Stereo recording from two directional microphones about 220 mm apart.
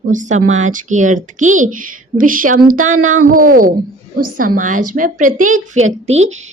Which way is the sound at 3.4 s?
40° right (ahead or behind).